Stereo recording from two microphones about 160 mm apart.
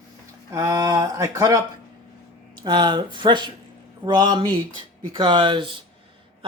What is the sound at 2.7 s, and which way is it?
Speech, 30° right (ahead or behind).